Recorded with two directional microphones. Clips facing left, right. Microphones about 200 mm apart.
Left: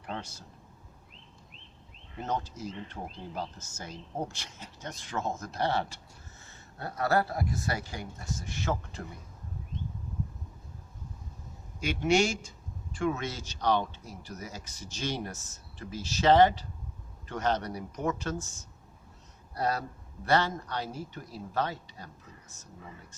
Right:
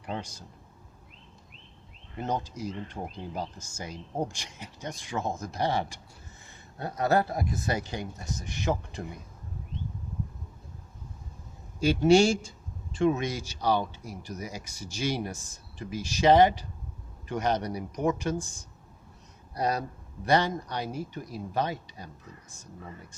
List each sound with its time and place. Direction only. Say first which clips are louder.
0.0 s a man's voice: right 3 dB; 15° right (ahead or behind)
2.2 s speech: right 2 dB; 15° right (ahead or behind)
11.8 s a man's voice: right 6 dB; 30° right (ahead or behind); by 22.6 s 15° right (ahead or behind)